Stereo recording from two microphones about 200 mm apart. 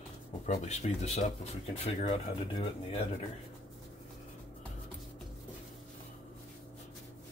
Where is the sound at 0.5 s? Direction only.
35° left (ahead or behind).